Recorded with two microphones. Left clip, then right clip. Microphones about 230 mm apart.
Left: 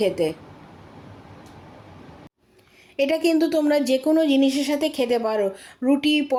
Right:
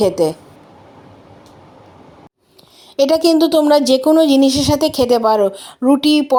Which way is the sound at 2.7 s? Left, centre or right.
Right.